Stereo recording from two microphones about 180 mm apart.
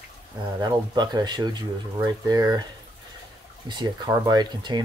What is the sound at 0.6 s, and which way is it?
Speech, 25° right (ahead or behind).